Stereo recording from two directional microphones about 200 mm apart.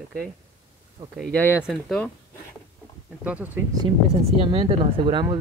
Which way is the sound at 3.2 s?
10° right (ahead or behind).